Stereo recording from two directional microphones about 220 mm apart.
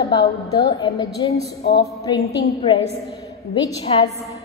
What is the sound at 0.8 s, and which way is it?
Speech, 15° left (ahead or behind).